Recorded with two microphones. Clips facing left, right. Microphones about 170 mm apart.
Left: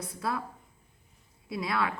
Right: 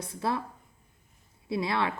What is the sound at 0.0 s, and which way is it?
Speech, 25° right (ahead or behind).